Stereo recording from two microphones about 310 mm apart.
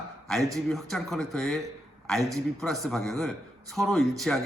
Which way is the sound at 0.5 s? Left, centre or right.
Centre.